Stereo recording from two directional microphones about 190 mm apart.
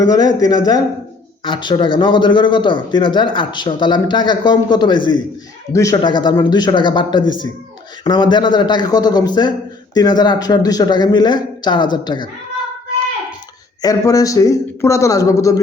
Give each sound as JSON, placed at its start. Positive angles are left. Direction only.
{"t": 0.0, "sound": "speech", "side_deg": 20}
{"t": 13.8, "sound": "a man's voice", "side_deg": 20}